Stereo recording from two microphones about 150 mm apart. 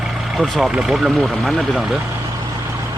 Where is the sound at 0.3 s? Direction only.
Centre (ahead or behind).